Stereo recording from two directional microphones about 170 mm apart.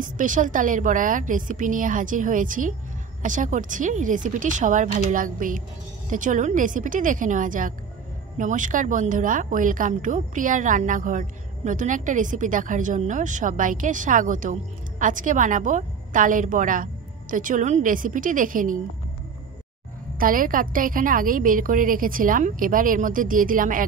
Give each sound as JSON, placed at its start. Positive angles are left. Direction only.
{"t": 0.0, "sound": "a woman's voice", "side_deg": -50}
{"t": 20.2, "sound": "a woman's voice", "side_deg": -55}